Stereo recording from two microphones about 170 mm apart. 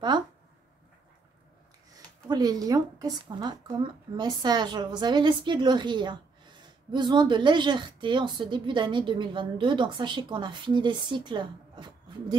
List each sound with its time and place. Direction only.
1.9 s speech: 20° right (ahead or behind)